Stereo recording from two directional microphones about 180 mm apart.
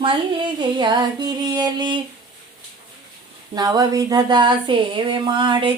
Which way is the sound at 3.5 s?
20° right (ahead or behind).